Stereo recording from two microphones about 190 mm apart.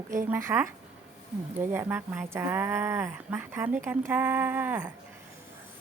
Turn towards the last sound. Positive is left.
turn(degrees=-10)  # may be behind; listen again after turning